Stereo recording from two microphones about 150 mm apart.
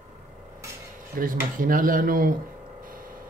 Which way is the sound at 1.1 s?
70° right (ahead or behind).